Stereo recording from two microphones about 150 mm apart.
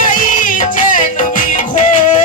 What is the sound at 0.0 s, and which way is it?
Music, 65° left (ahead or behind).